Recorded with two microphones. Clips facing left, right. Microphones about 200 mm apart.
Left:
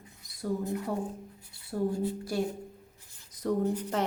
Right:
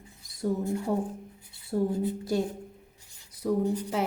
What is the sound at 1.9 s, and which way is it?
Speech, 20° right (ahead or behind).